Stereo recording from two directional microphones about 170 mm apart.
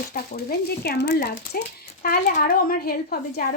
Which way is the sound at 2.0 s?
55° left (ahead or behind).